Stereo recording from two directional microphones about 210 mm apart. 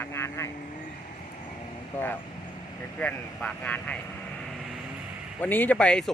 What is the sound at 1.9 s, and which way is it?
Speech, 10° left (ahead or behind).